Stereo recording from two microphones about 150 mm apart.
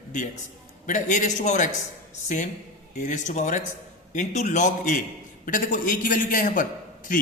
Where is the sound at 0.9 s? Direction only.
55° left (ahead or behind).